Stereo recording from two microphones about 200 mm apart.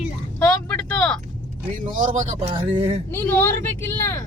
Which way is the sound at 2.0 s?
40° right (ahead or behind).